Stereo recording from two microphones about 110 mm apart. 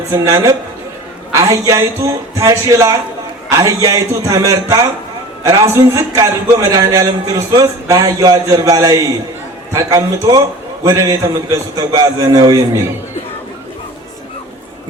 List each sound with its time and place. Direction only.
0.1 s a man's voice: 30° right (ahead or behind)